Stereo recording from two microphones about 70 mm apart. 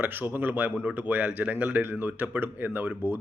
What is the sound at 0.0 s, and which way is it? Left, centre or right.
Speech, right.